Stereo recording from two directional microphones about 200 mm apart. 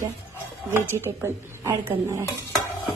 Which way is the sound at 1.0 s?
10° right (ahead or behind).